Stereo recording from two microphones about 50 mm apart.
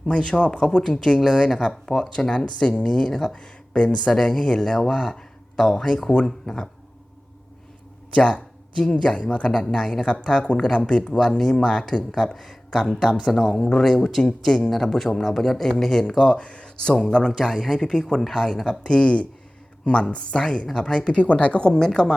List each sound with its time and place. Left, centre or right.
0.1 s speech: centre
1.2 s speech: centre
8.1 s speech: left
11.2 s speech: centre
16.2 s speech: left
17.3 s speech: centre
18.8 s speech: centre